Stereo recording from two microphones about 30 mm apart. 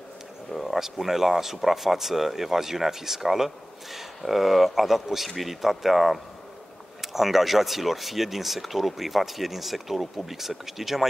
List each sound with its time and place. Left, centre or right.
0.5 s speech: centre
0.7 s speech: centre